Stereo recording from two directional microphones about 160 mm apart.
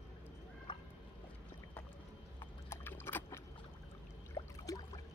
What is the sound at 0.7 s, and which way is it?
Fowl, 30° left (ahead or behind).